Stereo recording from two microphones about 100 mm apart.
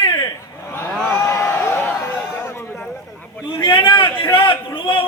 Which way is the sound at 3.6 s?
55° left (ahead or behind).